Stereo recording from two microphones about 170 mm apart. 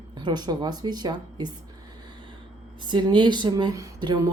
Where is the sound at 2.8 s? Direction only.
25° right (ahead or behind).